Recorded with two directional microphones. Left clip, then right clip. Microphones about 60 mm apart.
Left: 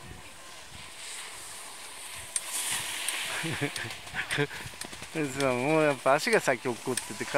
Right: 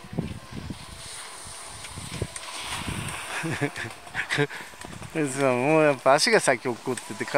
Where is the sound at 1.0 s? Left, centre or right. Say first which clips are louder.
Right 1 dB; centre.